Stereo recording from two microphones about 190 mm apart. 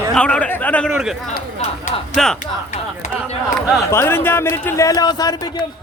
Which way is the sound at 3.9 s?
10° left (ahead or behind).